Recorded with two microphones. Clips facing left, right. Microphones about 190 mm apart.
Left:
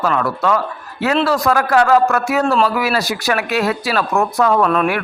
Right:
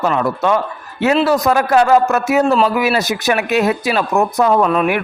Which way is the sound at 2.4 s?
5° right (ahead or behind).